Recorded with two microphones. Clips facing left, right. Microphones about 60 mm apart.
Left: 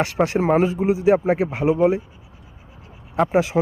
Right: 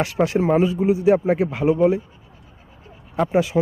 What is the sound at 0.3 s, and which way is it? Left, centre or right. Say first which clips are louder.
Speech: even; left.